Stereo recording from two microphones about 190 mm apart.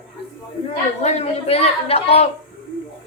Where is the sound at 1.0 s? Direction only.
35° left (ahead or behind).